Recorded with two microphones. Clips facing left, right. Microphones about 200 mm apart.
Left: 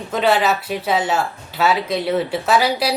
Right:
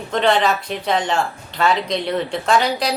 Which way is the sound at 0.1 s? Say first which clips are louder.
Even; 5° left (ahead or behind).